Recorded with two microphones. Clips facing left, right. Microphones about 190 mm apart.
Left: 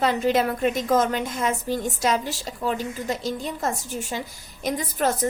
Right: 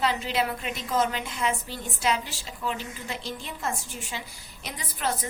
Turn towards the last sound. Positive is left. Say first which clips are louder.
# left 7 dB
turn(degrees=45)  # may be behind; listen again after turning